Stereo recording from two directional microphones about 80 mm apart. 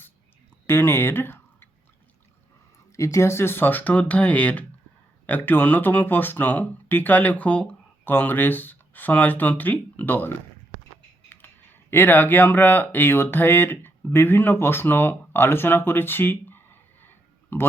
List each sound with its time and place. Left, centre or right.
0.7 s speech: left
2.9 s speech: left